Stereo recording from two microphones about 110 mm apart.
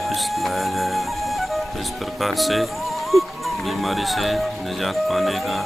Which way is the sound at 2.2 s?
Centre (ahead or behind).